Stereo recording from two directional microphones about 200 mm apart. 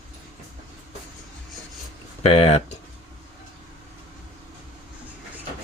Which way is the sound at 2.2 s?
30° left (ahead or behind).